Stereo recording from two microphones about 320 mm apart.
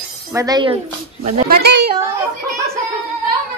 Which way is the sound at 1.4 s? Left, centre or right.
Right.